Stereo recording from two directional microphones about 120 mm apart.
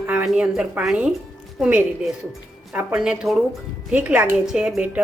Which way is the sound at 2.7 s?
5° right (ahead or behind).